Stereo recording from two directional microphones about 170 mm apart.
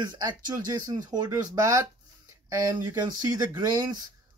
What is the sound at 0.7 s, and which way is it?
Speech, 25° right (ahead or behind).